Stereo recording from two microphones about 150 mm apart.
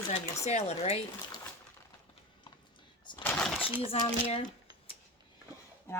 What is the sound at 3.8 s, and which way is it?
Speech, 40° left (ahead or behind).